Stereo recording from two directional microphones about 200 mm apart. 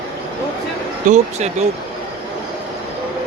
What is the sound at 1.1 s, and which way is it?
Speech, 35° right (ahead or behind).